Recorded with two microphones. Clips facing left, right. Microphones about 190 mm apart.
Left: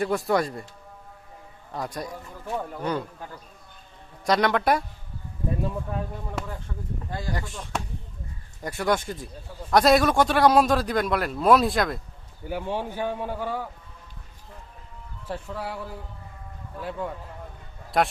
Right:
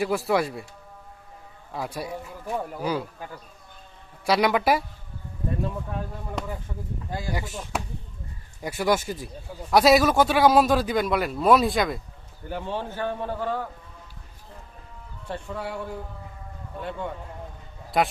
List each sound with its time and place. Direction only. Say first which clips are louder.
0.3 s a man's voice: even; 5° right (ahead or behind)
1.7 s speech: right 1 dB; 5° right (ahead or behind)
4.3 s a man's voice: right 1 dB; 5° right (ahead or behind)
6.7 s speech: right 1 dB; 15° right (ahead or behind)
7.3 s a man's voice: right 1 dB; centre (ahead or behind)
12.5 s a man's voice: left 2 dB; 10° left (ahead or behind)
15.3 s a man's voice: right 1 dB; centre (ahead or behind)